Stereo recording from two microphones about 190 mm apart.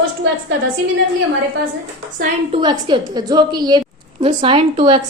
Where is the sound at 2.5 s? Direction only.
25° right (ahead or behind).